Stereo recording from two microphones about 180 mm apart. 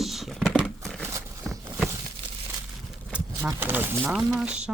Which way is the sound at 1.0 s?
15° right (ahead or behind).